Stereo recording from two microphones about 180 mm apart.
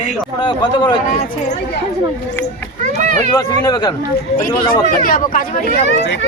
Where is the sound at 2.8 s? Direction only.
45° right (ahead or behind).